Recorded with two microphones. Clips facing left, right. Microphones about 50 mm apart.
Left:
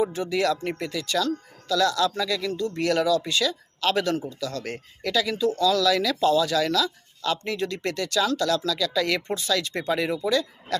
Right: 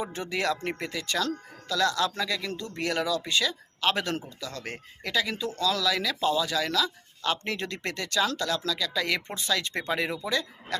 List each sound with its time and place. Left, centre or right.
0.0 s speech: right